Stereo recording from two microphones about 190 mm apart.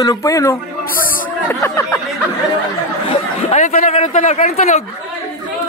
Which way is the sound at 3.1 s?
35° left (ahead or behind).